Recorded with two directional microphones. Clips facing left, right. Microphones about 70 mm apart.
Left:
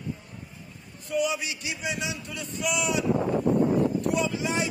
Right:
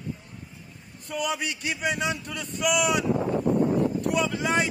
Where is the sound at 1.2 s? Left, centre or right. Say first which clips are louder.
Left 2 dB; right.